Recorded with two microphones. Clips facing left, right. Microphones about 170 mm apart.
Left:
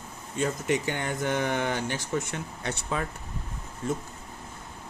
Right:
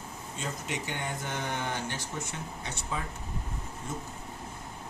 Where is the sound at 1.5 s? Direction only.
90° left.